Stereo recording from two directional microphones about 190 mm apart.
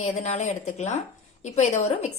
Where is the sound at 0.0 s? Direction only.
35° left (ahead or behind).